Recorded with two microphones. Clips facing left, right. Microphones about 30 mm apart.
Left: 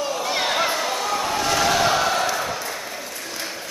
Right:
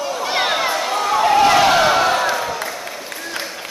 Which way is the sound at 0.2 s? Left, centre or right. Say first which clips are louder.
Right 6 dB; right.